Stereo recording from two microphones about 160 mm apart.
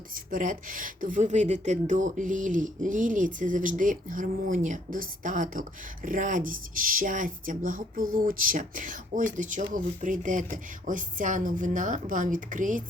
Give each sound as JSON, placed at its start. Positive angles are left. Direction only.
{"t": 0.1, "sound": "speech", "side_deg": -60}